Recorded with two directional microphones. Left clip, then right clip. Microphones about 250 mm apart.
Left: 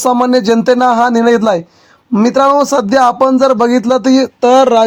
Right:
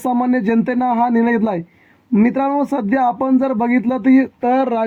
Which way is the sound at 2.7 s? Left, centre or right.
Left.